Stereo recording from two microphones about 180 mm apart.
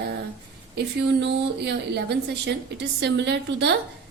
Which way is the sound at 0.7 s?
75° right (ahead or behind).